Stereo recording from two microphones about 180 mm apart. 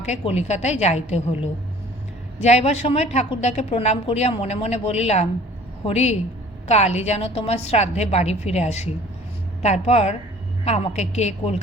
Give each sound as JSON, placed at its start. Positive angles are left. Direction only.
{"t": 0.0, "sound": "a woman's voice", "side_deg": 40}